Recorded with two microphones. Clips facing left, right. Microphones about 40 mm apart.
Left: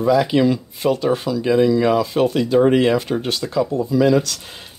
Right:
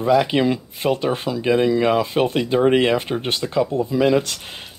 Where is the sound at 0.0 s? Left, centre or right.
Right.